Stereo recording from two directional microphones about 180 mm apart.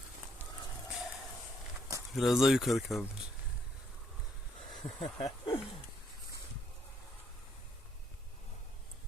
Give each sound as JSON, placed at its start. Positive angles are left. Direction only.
{"t": 0.9, "sound": "a sound", "side_deg": 0}
{"t": 2.1, "sound": "speech", "side_deg": 0}
{"t": 4.8, "sound": "speech", "side_deg": 30}